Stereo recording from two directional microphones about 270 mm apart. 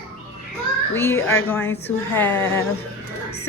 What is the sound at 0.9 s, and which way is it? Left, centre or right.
Speech, centre.